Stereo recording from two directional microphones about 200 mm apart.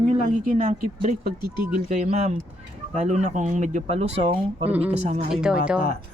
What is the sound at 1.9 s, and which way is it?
Speech, 35° right (ahead or behind).